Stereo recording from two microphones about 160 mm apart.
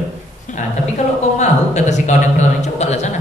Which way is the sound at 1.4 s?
45° left (ahead or behind).